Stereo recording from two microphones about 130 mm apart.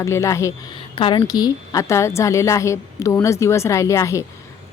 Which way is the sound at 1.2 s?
30° left (ahead or behind).